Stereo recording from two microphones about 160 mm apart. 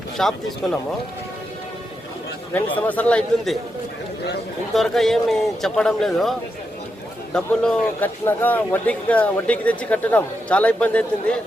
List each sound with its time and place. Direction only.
0.2 s a man's voice: 5° left (ahead or behind)
2.5 s speech: 10° left (ahead or behind)
4.7 s a man's voice: centre (ahead or behind)
7.3 s a man's voice: 5° left (ahead or behind)